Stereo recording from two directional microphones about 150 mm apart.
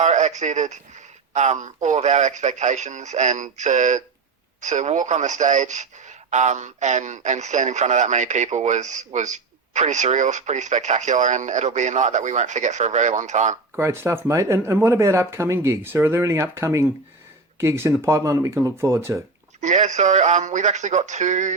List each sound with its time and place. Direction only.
0.0 s a man's voice: 50° right (ahead or behind)
13.7 s speech: 15° right (ahead or behind)
19.6 s a man's voice: 50° right (ahead or behind)